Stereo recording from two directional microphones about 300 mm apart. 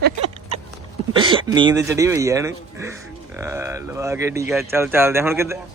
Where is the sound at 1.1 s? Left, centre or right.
Centre.